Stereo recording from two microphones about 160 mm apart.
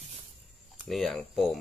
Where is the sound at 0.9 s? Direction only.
Centre (ahead or behind).